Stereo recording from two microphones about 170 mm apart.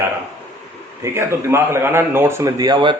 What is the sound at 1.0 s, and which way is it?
A man's voice, 15° right (ahead or behind).